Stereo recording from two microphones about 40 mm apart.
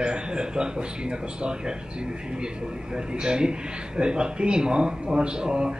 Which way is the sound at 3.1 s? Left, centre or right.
Right.